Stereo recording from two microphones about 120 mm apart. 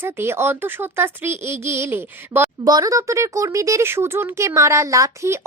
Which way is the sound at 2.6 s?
30° right (ahead or behind).